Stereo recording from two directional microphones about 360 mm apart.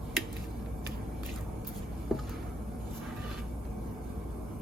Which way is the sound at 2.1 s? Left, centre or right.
Centre.